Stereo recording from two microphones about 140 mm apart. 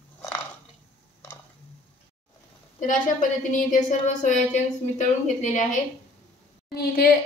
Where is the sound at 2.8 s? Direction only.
65° left (ahead or behind).